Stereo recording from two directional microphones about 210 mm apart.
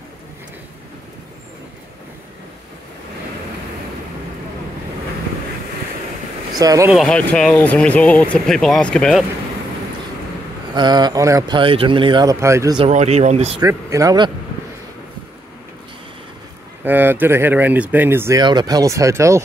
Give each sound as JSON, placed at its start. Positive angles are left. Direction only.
{"t": 6.6, "sound": "speech", "side_deg": -15}
{"t": 6.9, "sound": "speech", "side_deg": 0}
{"t": 10.7, "sound": "speech", "side_deg": -20}
{"t": 12.7, "sound": "speech", "side_deg": -30}
{"t": 13.6, "sound": "speech", "side_deg": -15}
{"t": 16.8, "sound": "speech", "side_deg": -10}